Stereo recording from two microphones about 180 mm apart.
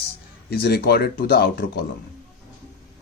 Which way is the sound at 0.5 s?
60° left (ahead or behind).